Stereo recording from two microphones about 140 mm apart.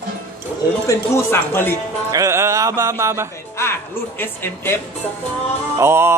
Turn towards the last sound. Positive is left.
turn(degrees=-20)  # may be behind; listen again after turning